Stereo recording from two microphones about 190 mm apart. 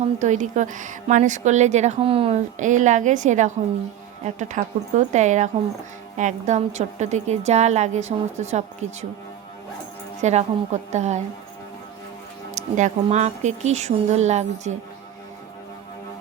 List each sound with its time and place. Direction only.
0.2 s a woman's voice: 40° right (ahead or behind)
2.6 s a woman's voice: 40° right (ahead or behind)
10.2 s a woman's voice: 35° right (ahead or behind)
12.5 s a woman's voice: 40° right (ahead or behind)